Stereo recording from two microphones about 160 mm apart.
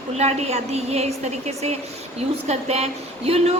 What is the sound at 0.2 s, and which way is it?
A woman's voice, 40° right (ahead or behind).